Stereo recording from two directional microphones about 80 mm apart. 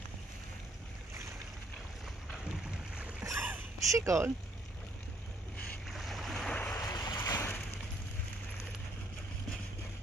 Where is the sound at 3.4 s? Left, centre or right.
Right.